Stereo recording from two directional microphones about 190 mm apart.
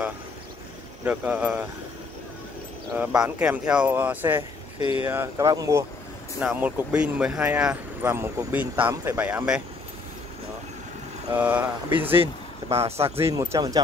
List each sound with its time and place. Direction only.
1.0 s speech: 5° right (ahead or behind)
3.0 s speech: 10° right (ahead or behind)
4.7 s speech: 30° left (ahead or behind)
5.0 s speech: 15° right (ahead or behind)
11.3 s speech: 10° right (ahead or behind)
12.8 s speech: 30° right (ahead or behind)
13.3 s speech: 20° right (ahead or behind)